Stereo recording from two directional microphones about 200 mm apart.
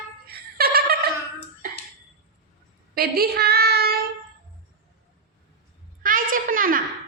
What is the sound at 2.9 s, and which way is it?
Child singing, 50° right (ahead or behind).